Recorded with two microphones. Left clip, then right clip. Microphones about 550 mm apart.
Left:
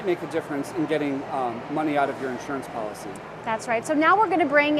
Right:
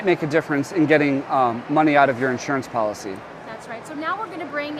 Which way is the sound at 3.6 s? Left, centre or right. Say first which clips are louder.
Left 7 dB; left.